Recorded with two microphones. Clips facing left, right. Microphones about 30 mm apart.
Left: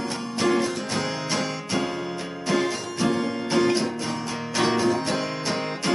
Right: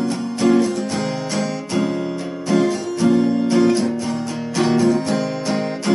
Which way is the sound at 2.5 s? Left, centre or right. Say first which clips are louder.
Right 6 dB; centre.